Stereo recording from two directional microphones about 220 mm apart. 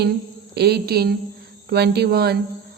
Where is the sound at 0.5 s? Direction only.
45° right (ahead or behind).